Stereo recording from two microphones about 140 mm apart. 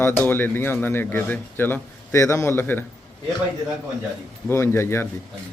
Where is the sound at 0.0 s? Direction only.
15° left (ahead or behind).